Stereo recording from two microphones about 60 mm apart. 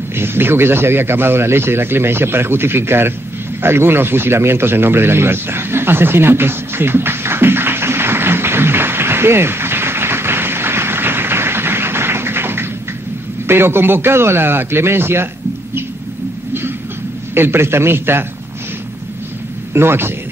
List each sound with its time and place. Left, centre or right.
0.1 s a man's voice: right
3.6 s a sound: right
13.5 s a man's voice: right
17.3 s a man's voice: right
19.7 s a man's voice: right